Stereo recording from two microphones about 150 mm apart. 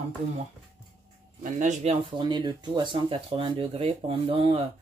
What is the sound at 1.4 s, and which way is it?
Speech, 50° right (ahead or behind).